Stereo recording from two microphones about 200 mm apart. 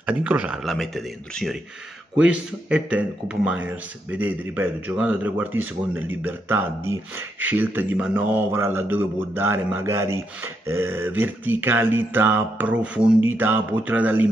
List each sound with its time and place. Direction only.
0.0 s a man's voice: 5° right (ahead or behind)